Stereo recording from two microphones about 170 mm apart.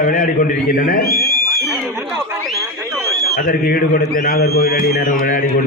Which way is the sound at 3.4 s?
55° left (ahead or behind).